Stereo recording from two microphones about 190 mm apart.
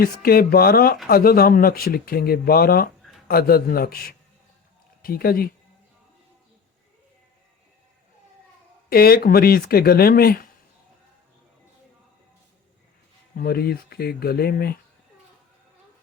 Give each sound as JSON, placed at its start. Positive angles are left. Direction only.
{"t": 0.0, "sound": "speech", "side_deg": 50}
{"t": 8.9, "sound": "speech", "side_deg": 50}
{"t": 13.3, "sound": "speech", "side_deg": 50}